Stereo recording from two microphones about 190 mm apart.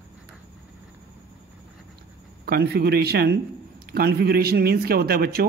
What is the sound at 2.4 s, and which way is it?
A man's voice, 55° right (ahead or behind).